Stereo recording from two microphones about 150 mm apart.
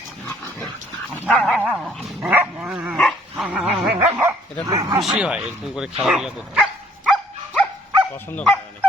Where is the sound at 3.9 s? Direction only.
15° right (ahead or behind).